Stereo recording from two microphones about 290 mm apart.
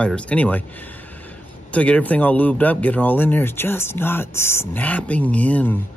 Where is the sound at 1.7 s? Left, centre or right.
Centre.